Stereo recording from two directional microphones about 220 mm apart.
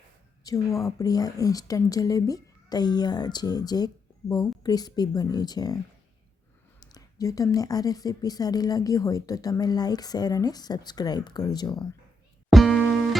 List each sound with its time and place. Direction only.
0.4 s speech: 15° left (ahead or behind)
6.7 s speech: 15° left (ahead or behind)
12.5 s music: centre (ahead or behind)